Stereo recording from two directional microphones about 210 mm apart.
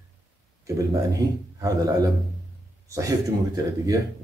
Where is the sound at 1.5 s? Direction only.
15° right (ahead or behind).